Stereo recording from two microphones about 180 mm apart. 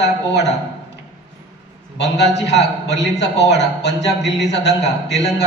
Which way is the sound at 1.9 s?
75° left (ahead or behind).